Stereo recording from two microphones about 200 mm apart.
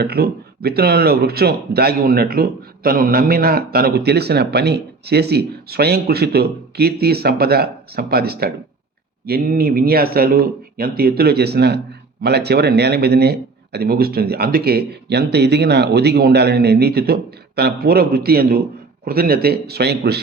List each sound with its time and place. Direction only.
0.0 s speech: 50° right (ahead or behind)